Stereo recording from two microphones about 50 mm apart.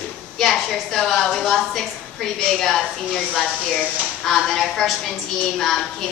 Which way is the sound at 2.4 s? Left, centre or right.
Centre.